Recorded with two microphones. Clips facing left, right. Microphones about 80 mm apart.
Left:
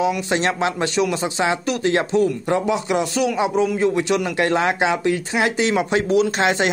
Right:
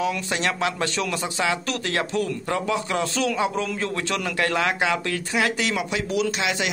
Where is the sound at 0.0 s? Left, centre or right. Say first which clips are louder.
Left 5 dB; left.